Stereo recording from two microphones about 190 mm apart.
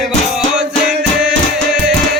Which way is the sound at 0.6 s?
5° right (ahead or behind).